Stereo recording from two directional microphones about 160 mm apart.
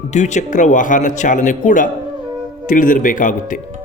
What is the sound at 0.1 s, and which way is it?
A man's voice, 45° left (ahead or behind).